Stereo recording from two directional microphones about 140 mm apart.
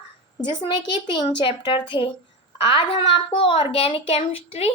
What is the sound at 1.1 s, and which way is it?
A woman's voice, 35° left (ahead or behind).